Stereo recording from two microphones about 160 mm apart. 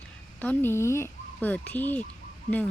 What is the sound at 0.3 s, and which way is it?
Speech, 10° left (ahead or behind).